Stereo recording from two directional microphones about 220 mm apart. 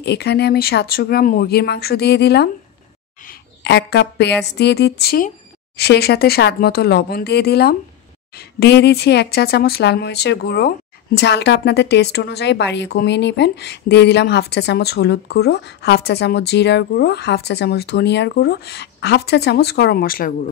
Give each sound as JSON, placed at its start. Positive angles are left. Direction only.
{"t": 0.0, "sound": "a woman's voice", "side_deg": 50}